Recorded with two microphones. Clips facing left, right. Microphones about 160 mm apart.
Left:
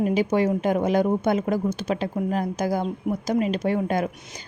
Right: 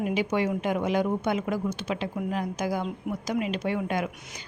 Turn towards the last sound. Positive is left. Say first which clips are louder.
# left 5 dB
turn(degrees=40)  # may be behind; listen again after turning